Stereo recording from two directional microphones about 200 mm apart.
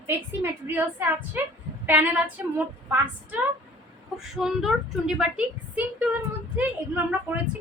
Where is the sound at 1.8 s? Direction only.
10° right (ahead or behind).